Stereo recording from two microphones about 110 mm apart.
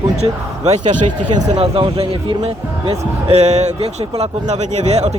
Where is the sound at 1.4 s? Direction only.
70° right (ahead or behind).